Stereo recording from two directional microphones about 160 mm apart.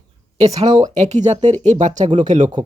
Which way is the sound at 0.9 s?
45° right (ahead or behind).